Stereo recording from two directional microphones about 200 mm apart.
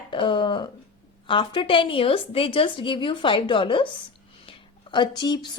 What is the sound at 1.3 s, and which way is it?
A woman's voice, 25° left (ahead or behind).